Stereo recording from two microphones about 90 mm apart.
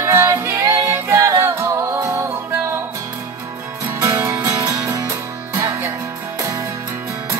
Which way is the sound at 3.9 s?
35° right (ahead or behind).